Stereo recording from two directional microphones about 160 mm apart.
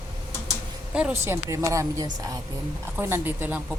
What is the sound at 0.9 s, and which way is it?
A woman's voice, 10° right (ahead or behind).